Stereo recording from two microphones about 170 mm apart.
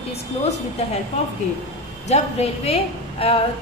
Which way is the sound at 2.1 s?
40° left (ahead or behind).